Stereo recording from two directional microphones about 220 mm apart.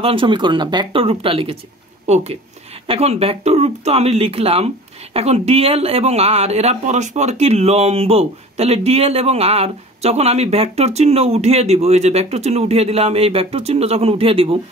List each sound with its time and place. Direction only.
0.0 s speech: 25° right (ahead or behind)